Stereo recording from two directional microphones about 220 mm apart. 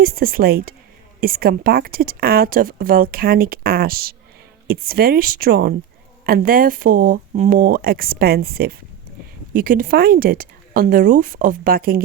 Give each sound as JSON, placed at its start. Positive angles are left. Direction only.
{"t": 0.0, "sound": "a woman's voice", "side_deg": -45}